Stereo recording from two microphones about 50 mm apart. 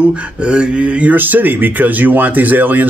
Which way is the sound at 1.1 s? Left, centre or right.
Right.